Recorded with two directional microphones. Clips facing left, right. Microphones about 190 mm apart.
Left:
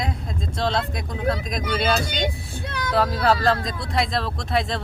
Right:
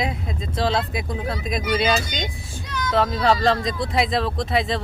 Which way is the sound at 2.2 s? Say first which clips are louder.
Left 5 dB; 60° left (ahead or behind).